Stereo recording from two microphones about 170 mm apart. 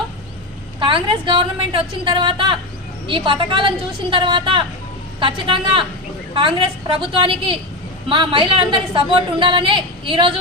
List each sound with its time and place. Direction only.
0.8 s a woman's voice: 30° right (ahead or behind)